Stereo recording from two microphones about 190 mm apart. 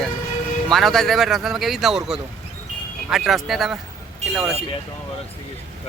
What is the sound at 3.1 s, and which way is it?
Speech, centre (ahead or behind).